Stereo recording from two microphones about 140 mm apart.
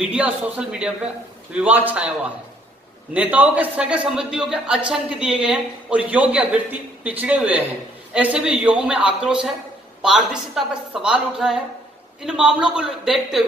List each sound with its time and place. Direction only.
0.0 s a man's voice: 10° right (ahead or behind)